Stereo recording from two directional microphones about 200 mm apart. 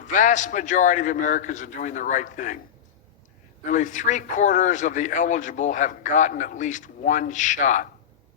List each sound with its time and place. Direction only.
0.1 s a man's voice: 40° left (ahead or behind)
3.7 s a man's voice: 40° left (ahead or behind)